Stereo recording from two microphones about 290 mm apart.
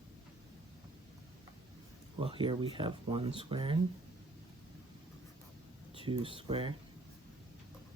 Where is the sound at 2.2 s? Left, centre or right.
Centre.